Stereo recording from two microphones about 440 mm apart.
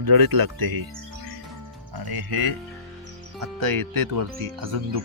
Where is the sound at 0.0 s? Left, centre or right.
Right.